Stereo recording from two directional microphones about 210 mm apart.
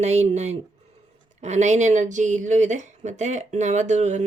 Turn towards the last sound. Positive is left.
turn(degrees=-35)  # may be behind; listen again after turning